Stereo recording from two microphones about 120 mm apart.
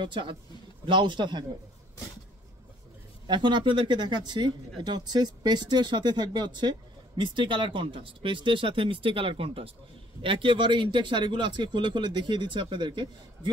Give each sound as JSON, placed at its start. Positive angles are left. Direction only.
{"t": 0.0, "sound": "a man's voice", "side_deg": -45}
{"t": 3.3, "sound": "speech", "side_deg": -40}